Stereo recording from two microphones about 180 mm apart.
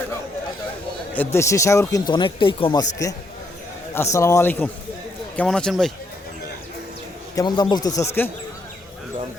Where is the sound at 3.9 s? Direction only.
15° left (ahead or behind).